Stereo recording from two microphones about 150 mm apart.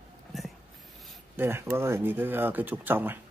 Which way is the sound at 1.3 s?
15° right (ahead or behind).